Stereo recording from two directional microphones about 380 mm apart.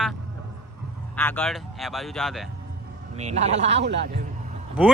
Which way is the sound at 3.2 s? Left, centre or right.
Centre.